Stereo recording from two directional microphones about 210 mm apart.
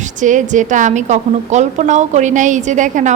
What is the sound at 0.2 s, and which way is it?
A woman's voice, 35° right (ahead or behind).